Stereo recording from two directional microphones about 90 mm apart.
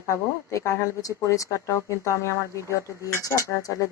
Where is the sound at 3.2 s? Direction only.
40° left (ahead or behind).